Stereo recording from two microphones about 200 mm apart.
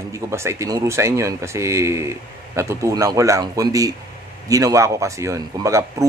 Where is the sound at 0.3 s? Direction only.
15° right (ahead or behind).